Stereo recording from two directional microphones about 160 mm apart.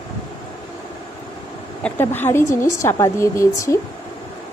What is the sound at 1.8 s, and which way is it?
A woman's voice, 15° left (ahead or behind).